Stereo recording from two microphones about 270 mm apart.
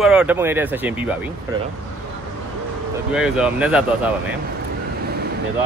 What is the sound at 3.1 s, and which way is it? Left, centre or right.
Speech, centre.